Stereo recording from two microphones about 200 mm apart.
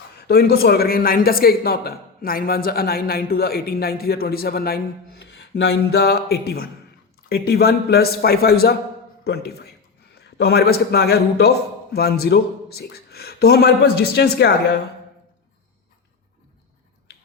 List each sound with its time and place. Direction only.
0.2 s a man's voice: 50° left (ahead or behind)